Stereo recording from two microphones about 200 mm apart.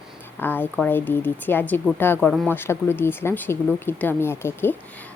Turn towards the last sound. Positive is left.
turn(degrees=10)  # may be behind; listen again after turning